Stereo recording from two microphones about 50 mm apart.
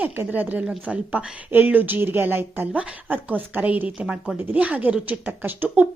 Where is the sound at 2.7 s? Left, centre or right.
Right.